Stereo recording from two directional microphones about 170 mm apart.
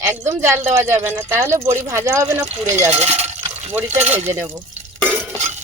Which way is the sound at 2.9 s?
40° right (ahead or behind).